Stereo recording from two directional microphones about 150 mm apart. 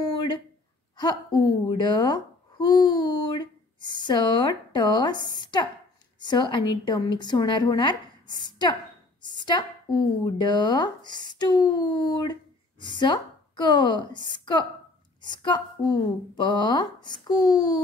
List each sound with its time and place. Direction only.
0.9 s a woman's voice: 30° left (ahead or behind)